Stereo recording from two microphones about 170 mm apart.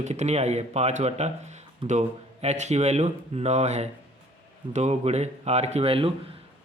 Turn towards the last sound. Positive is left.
turn(degrees=-35)  # may be behind; listen again after turning